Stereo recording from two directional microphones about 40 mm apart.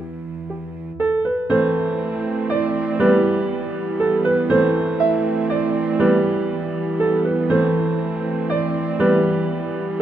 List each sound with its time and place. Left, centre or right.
1.0 s music: right
4.0 s music: right